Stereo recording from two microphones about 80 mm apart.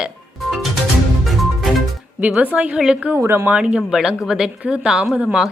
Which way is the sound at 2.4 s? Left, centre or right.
Centre.